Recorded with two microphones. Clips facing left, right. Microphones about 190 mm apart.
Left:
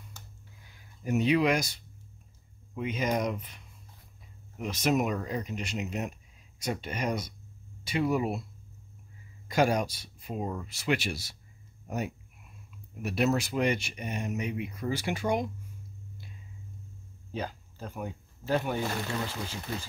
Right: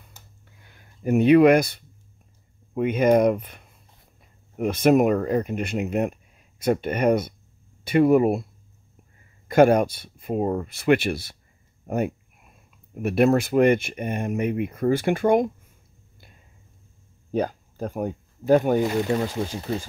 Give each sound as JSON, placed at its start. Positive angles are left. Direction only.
{"t": 0.7, "sound": "speech", "side_deg": -55}
{"t": 9.5, "sound": "speech", "side_deg": -55}
{"t": 12.9, "sound": "speech", "side_deg": -55}
{"t": 17.3, "sound": "speech", "side_deg": -50}